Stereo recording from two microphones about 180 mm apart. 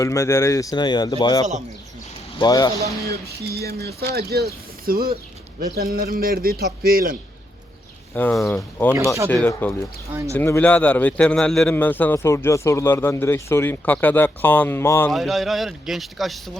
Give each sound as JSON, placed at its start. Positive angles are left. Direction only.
{"t": 0.0, "sound": "speech", "side_deg": 15}
{"t": 3.1, "sound": "a man's voice", "side_deg": -65}
{"t": 8.1, "sound": "a man's voice", "side_deg": 10}
{"t": 9.3, "sound": "a man's voice", "side_deg": 15}
{"t": 10.1, "sound": "speech", "side_deg": -15}
{"t": 10.3, "sound": "a man's voice", "side_deg": 10}
{"t": 15.1, "sound": "speech", "side_deg": 0}